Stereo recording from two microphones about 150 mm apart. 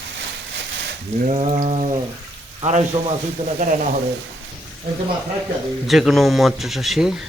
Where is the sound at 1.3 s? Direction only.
45° right (ahead or behind).